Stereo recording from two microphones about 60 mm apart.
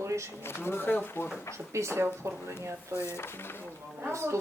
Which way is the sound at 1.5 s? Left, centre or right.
Right.